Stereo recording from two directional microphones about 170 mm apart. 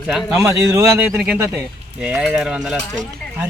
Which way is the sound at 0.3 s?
15° right (ahead or behind).